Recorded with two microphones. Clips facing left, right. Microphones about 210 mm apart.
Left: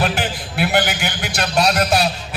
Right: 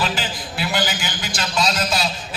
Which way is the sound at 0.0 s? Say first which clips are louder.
Left 4 dB; 60° left (ahead or behind).